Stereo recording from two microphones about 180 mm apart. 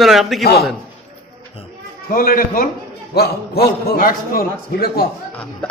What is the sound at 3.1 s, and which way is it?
A man's voice, 60° left (ahead or behind).